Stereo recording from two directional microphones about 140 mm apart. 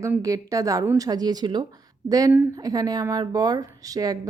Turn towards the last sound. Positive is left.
turn(degrees=-25)  # may be behind; listen again after turning